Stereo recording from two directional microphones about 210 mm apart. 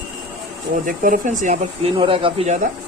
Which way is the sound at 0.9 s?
40° right (ahead or behind).